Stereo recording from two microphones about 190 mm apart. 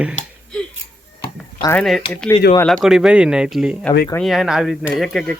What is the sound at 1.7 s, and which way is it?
Speech, centre (ahead or behind).